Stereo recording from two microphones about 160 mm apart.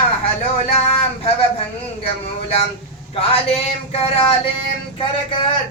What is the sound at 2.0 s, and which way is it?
Speech, 40° left (ahead or behind).